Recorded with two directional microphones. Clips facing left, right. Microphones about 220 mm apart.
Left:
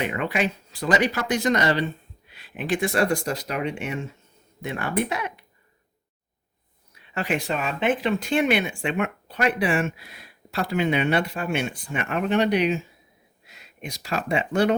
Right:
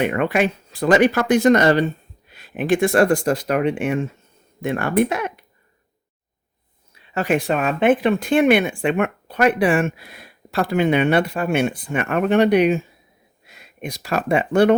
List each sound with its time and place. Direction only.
0.0 s speech: 55° right (ahead or behind)
7.1 s speech: 45° right (ahead or behind)
13.8 s speech: 55° right (ahead or behind)